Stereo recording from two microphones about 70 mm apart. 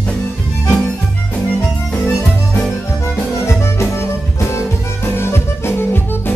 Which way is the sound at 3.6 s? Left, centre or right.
Left.